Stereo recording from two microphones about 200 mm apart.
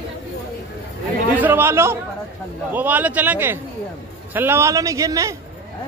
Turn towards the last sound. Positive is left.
turn(degrees=-15)  # may be behind; listen again after turning